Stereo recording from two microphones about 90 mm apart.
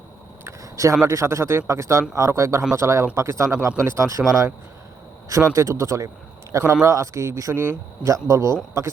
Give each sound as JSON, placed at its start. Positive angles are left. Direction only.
{"t": 0.4, "sound": "a sound", "side_deg": -35}
{"t": 1.0, "sound": "speech", "side_deg": -35}
{"t": 5.5, "sound": "speech", "side_deg": -35}